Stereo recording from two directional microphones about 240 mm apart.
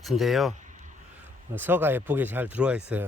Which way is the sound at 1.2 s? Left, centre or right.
Centre.